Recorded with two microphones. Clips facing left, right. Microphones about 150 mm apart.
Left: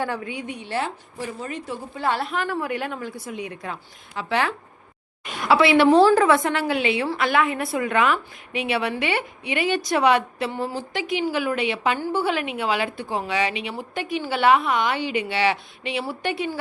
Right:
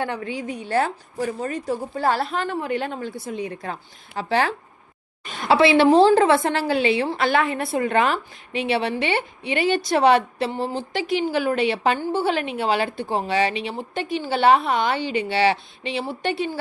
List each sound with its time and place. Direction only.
0.3 s a woman's voice: 35° right (ahead or behind)